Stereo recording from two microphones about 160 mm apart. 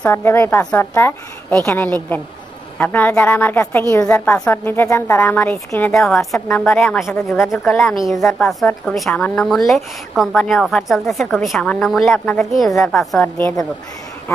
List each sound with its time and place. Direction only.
0.0 s a woman's voice: 15° left (ahead or behind)